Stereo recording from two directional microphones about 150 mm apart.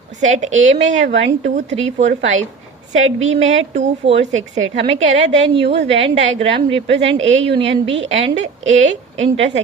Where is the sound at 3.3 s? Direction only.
50° right (ahead or behind).